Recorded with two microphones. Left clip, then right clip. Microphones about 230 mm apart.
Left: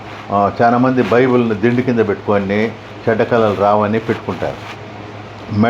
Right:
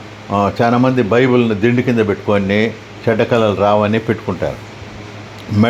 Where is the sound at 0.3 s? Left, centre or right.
Right.